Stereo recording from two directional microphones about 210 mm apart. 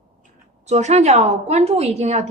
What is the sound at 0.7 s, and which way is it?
A woman's voice, 30° right (ahead or behind).